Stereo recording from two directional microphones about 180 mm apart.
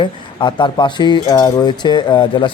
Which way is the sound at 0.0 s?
25° left (ahead or behind).